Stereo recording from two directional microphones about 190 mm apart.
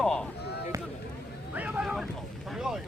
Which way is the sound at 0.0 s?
5° left (ahead or behind).